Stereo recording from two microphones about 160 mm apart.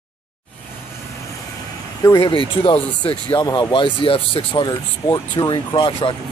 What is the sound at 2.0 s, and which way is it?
Speech, 30° left (ahead or behind).